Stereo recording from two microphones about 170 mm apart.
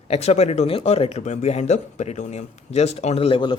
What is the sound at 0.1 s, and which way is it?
Speech, 40° left (ahead or behind).